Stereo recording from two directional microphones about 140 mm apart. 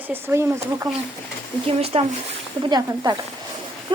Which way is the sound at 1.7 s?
45° right (ahead or behind).